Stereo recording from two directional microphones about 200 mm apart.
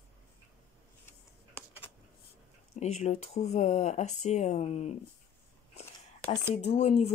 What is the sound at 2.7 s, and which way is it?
Speech, 35° left (ahead or behind).